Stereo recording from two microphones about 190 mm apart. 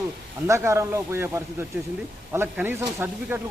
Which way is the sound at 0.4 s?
15° right (ahead or behind).